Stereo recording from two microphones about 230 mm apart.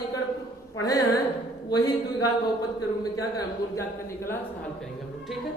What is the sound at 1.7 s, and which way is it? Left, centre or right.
Speech, centre.